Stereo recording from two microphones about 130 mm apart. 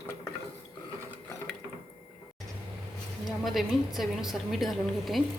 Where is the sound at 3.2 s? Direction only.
Centre (ahead or behind).